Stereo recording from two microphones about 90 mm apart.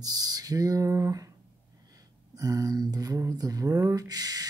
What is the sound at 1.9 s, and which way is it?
Speech, 40° right (ahead or behind).